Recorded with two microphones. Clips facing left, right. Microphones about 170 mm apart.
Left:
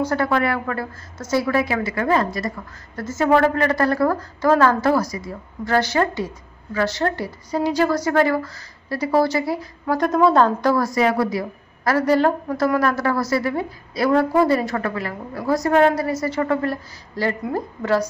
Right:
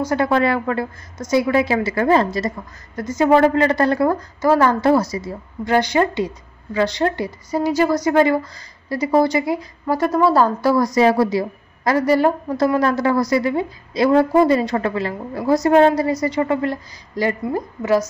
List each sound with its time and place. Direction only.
0.1 s a woman's voice: 20° right (ahead or behind)
3.0 s a woman's voice: 15° right (ahead or behind)
11.0 s a woman's voice: 30° right (ahead or behind); by 18.0 s 10° right (ahead or behind)